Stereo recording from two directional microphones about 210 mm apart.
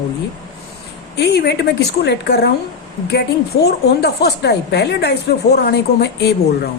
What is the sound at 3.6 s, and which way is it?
Speech, 50° left (ahead or behind).